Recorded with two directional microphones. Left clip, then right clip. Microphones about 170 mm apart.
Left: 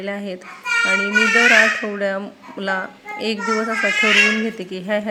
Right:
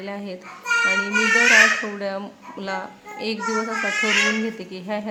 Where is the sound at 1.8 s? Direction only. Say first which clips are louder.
Left 5 dB; 15° left (ahead or behind).